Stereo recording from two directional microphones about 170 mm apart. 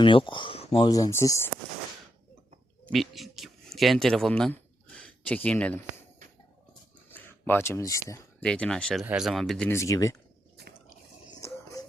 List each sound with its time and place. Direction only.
0.0 s speech: 30° left (ahead or behind)
0.9 s speech: 20° left (ahead or behind)
2.9 s speech: centre (ahead or behind)
7.1 s speech: 10° left (ahead or behind)
8.4 s speech: 5° left (ahead or behind)
9.6 s speech: 15° left (ahead or behind)
11.3 s a sound: 20° left (ahead or behind)